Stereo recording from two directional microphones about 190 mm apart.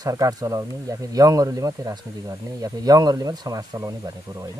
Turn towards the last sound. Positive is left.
turn(degrees=-20)  # may be behind; listen again after turning